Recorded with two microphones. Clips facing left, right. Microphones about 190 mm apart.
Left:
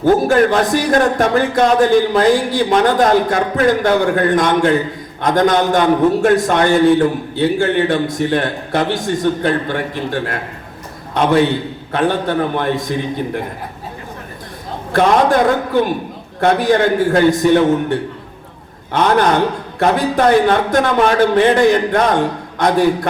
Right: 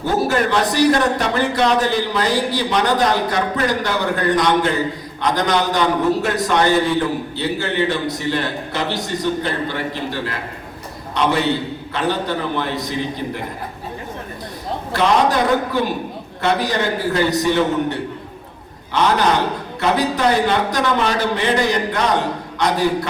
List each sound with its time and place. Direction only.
0.0 s a man's voice: 50° left (ahead or behind)
14.9 s a man's voice: 50° left (ahead or behind)